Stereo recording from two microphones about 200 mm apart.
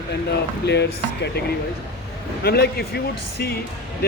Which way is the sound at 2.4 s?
50° left (ahead or behind).